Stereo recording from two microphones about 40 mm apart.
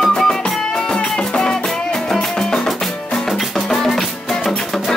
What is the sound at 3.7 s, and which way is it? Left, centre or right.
Music, centre.